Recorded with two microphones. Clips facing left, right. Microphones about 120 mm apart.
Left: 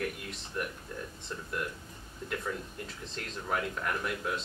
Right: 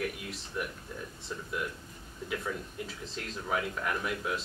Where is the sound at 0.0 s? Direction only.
Centre (ahead or behind).